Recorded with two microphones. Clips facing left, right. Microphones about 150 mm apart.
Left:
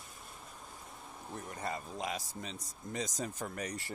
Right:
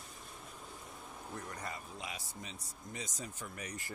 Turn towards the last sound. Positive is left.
turn(degrees=35)  # may be behind; listen again after turning